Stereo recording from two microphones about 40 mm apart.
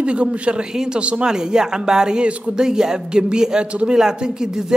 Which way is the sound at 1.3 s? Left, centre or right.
Centre.